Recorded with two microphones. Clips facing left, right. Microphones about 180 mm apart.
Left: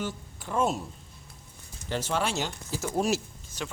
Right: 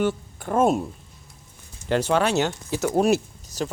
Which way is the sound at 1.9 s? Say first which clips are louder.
Right 8 dB; 65° right (ahead or behind).